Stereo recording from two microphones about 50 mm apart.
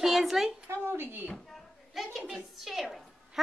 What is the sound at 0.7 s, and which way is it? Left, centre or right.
Speech, right.